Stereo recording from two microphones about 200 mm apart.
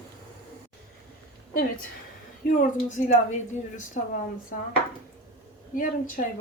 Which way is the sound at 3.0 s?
40° left (ahead or behind).